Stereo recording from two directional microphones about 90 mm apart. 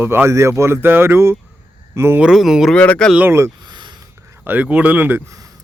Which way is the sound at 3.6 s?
55° right (ahead or behind).